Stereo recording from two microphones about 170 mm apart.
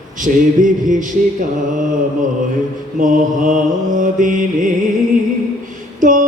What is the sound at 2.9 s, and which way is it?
Mantra, 50° right (ahead or behind).